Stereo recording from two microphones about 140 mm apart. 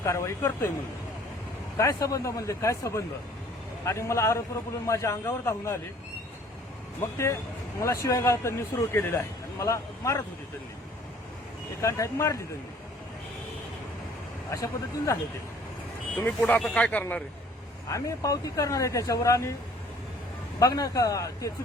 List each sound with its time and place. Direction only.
0.0 s a man's voice: 20° left (ahead or behind)
1.8 s a man's voice: 25° left (ahead or behind)
7.8 s a man's voice: 20° left (ahead or behind)
11.8 s a man's voice: 20° left (ahead or behind)
14.5 s a man's voice: 25° left (ahead or behind)
16.1 s speech: 10° left (ahead or behind)
17.8 s a man's voice: 25° left (ahead or behind)
20.6 s a man's voice: 25° left (ahead or behind)